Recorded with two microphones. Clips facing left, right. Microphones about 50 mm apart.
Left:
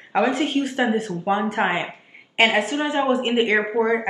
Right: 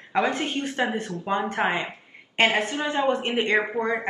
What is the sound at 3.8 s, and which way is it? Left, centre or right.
Speech, left.